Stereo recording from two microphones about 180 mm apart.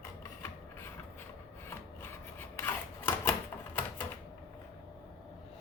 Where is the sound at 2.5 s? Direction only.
10° left (ahead or behind).